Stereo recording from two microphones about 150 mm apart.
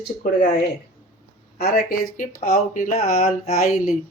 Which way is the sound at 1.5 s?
85° left.